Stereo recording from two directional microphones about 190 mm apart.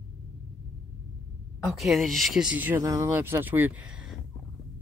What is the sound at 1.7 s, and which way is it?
Speech, centre (ahead or behind).